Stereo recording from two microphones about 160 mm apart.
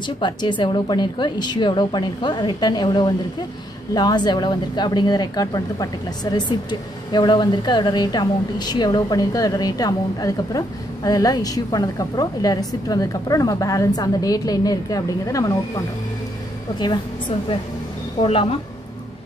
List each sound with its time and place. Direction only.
0.0 s speech: 30° left (ahead or behind)
18.2 s a woman's voice: 35° left (ahead or behind)